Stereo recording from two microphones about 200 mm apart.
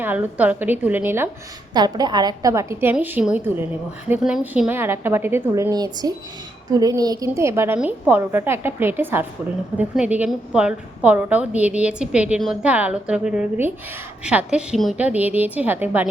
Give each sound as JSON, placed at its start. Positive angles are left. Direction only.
{"t": 0.0, "sound": "speech", "side_deg": -10}
{"t": 1.7, "sound": "a woman's voice", "side_deg": -20}